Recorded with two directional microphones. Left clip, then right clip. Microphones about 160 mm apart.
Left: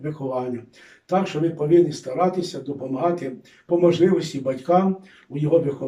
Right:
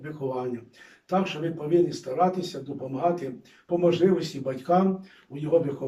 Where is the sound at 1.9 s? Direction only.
25° left (ahead or behind).